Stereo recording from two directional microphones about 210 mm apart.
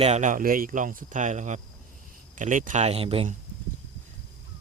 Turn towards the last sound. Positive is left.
turn(degrees=-25)  # may be behind; listen again after turning